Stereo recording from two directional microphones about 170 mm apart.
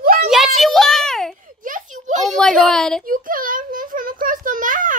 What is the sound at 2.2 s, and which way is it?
Speech, 5° left (ahead or behind).